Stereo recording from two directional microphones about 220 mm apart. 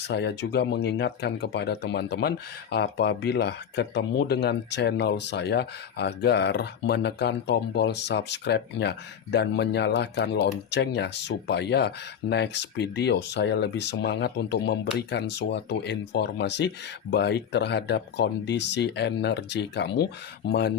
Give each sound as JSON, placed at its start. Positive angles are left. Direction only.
{"t": 0.0, "sound": "speech", "side_deg": 50}